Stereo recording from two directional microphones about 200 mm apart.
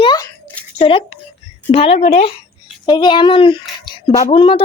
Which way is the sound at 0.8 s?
25° left (ahead or behind).